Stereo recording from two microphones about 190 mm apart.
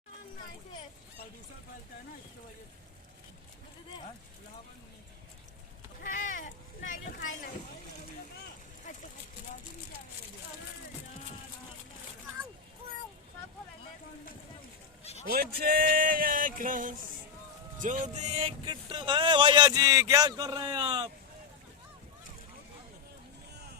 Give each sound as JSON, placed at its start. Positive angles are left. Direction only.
{"t": 6.0, "sound": "boat", "side_deg": 45}
{"t": 15.3, "sound": "a sound", "side_deg": -50}
{"t": 17.7, "sound": "speech", "side_deg": -40}